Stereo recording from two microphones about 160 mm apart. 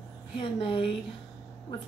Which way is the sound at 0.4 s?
35° left (ahead or behind).